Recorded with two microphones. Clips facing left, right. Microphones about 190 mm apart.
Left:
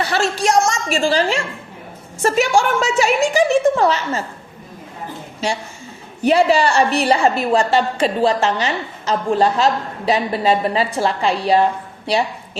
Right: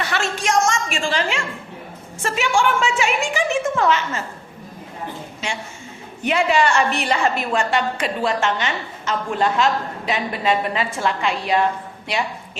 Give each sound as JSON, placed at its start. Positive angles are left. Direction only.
{"t": 0.0, "sound": "a woman's voice", "side_deg": 35}
{"t": 6.2, "sound": "a woman's voice", "side_deg": 35}